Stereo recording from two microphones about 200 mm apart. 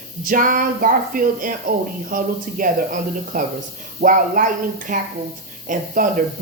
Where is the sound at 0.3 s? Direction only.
45° right (ahead or behind).